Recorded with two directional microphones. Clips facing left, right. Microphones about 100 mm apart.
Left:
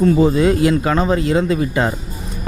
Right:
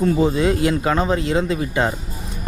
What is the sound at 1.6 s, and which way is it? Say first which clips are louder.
Speech: left 3 dB; 30° left (ahead or behind).